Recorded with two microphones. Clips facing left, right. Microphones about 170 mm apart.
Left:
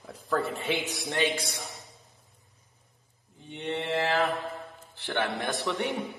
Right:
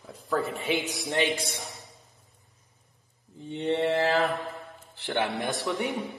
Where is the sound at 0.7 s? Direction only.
15° right (ahead or behind).